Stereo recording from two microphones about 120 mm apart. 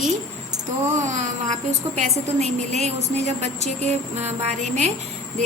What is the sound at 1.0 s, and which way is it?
A woman's voice, 90° right.